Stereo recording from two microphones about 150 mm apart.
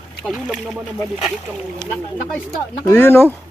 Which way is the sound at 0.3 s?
Centre (ahead or behind).